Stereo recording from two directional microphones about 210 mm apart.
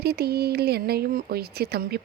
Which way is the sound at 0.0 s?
50° right (ahead or behind).